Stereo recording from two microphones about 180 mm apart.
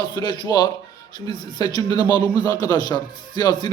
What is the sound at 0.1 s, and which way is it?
A man's voice, 20° left (ahead or behind).